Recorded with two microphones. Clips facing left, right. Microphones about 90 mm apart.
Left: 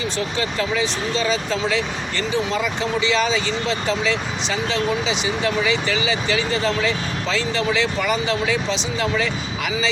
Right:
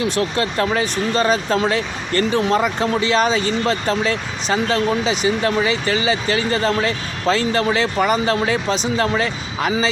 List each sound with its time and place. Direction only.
0.0 s speech: 60° right (ahead or behind); by 9.9 s 40° right (ahead or behind)